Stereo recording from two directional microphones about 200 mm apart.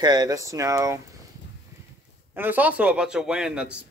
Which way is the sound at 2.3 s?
10° right (ahead or behind).